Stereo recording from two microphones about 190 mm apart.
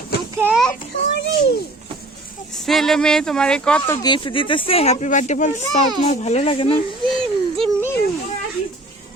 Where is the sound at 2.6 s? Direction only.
Centre (ahead or behind).